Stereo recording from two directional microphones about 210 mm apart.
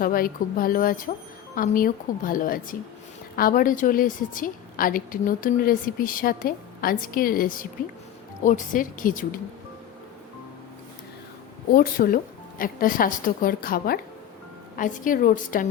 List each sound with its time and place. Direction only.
0.0 s a woman's voice: 45° left (ahead or behind)
11.7 s a woman's voice: 45° left (ahead or behind)